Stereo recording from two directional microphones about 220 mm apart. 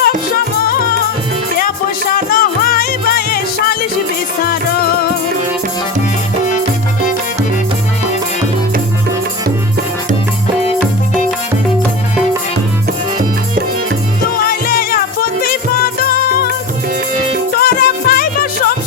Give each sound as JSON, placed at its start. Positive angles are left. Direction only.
{"t": 2.3, "sound": "music", "side_deg": 40}
{"t": 14.4, "sound": "music", "side_deg": 40}
{"t": 17.6, "sound": "music", "side_deg": 40}